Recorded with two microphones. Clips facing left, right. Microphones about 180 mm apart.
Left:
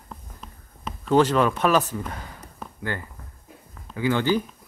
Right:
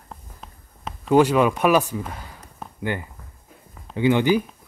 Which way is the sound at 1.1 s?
10° right (ahead or behind).